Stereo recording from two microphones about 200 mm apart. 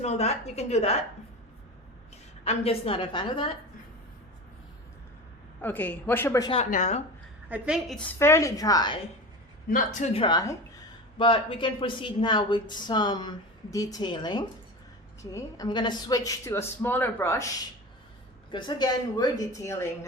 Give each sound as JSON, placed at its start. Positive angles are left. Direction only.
{"t": 0.0, "sound": "a woman's voice", "side_deg": 35}
{"t": 2.4, "sound": "speech", "side_deg": 30}
{"t": 5.6, "sound": "a woman's voice", "side_deg": 10}
{"t": 6.5, "sound": "a woman's voice", "side_deg": 35}
{"t": 7.5, "sound": "a woman's voice", "side_deg": -5}
{"t": 9.6, "sound": "a woman's voice", "side_deg": 40}
{"t": 18.5, "sound": "a woman's voice", "side_deg": 20}